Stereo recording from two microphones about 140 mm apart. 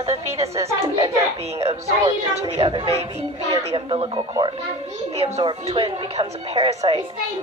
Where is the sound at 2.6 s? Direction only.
40° right (ahead or behind).